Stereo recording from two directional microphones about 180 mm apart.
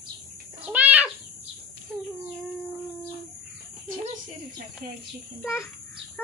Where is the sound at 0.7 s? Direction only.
10° right (ahead or behind).